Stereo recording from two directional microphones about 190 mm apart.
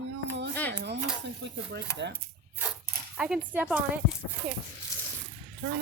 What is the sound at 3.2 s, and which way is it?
Speech, 5° right (ahead or behind).